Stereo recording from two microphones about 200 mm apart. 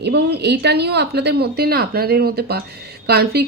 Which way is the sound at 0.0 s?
55° right (ahead or behind).